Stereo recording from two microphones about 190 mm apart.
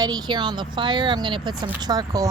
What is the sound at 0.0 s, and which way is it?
A woman's voice, 20° right (ahead or behind).